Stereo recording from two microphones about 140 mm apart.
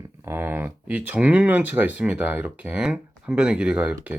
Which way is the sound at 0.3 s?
15° right (ahead or behind).